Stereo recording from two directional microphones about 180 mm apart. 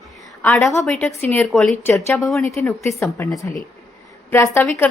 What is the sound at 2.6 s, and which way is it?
Speech, 15° left (ahead or behind).